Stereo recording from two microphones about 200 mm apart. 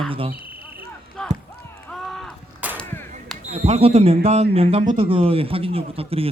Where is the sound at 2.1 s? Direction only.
5° right (ahead or behind).